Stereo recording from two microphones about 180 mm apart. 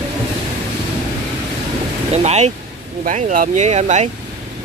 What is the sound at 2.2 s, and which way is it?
Speech, 40° right (ahead or behind).